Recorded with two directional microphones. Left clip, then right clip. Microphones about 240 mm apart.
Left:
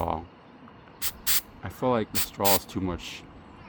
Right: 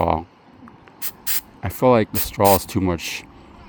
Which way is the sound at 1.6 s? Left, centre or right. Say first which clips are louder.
Right 12 dB; right.